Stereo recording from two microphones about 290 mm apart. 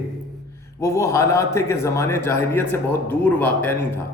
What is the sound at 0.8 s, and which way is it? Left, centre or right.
A man's voice, centre.